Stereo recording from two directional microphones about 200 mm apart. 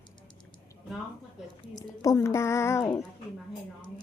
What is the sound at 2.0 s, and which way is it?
Speech, 15° left (ahead or behind).